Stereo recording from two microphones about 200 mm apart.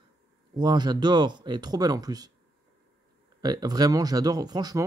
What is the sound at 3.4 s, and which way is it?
Speech, 20° right (ahead or behind).